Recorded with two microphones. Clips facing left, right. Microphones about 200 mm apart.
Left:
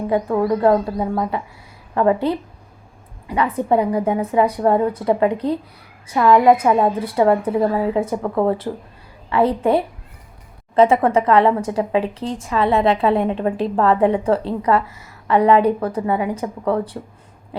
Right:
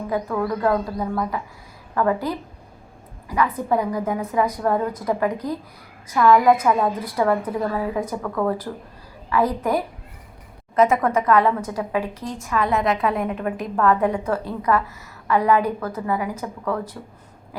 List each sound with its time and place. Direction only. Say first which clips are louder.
0.1 s speech: left 6 dB; 30° left (ahead or behind)